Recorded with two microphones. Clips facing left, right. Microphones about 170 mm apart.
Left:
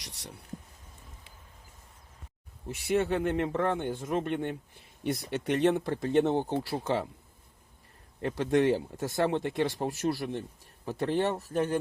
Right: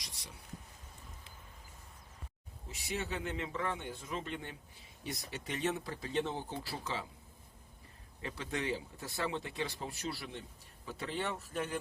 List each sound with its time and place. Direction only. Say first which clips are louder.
0.0 s speech: left 6 dB; 70° left (ahead or behind)
2.6 s speech: left 12 dB; 60° left (ahead or behind)
8.2 s speech: left 13 dB; 50° left (ahead or behind)